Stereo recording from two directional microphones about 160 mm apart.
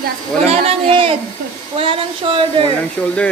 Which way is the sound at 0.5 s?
40° right (ahead or behind).